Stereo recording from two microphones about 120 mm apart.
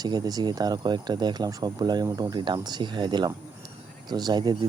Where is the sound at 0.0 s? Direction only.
35° right (ahead or behind).